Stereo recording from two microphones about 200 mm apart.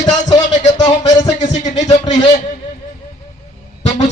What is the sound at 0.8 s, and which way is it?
Speech, 20° left (ahead or behind).